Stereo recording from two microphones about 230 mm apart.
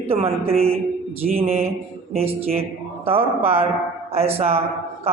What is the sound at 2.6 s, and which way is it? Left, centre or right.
A man's voice, right.